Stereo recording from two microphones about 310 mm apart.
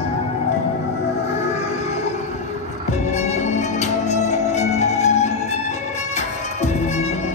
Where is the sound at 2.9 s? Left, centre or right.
Left.